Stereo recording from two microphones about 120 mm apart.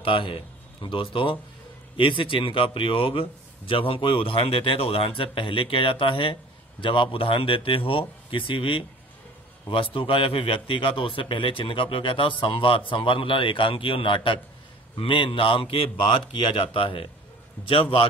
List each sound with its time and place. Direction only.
0.0 s a man's voice: 45° left (ahead or behind)